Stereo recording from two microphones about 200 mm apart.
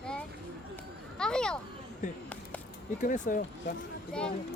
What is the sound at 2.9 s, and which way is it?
Speech, 40° left (ahead or behind).